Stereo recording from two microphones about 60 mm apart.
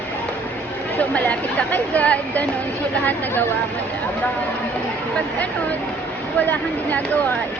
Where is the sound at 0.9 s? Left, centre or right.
Left.